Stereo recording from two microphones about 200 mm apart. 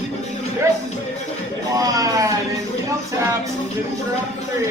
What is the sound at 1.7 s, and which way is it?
Speech, 15° right (ahead or behind).